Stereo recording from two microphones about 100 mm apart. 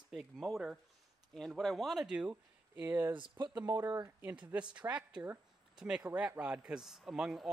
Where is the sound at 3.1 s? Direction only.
55° right (ahead or behind).